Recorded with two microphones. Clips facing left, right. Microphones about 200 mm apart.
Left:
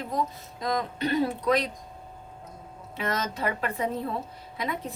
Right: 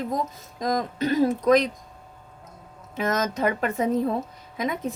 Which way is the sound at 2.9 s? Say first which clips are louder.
Right 5 dB; 45° right (ahead or behind).